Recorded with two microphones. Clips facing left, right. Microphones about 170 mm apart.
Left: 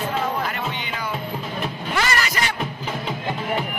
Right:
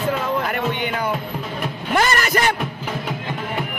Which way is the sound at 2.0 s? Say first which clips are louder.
Right 5 dB; 50° right (ahead or behind).